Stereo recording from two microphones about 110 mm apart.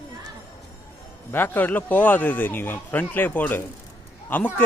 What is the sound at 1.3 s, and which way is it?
A man's voice, 15° left (ahead or behind).